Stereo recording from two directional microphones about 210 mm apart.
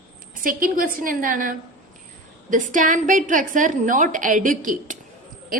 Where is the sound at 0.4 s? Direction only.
40° right (ahead or behind).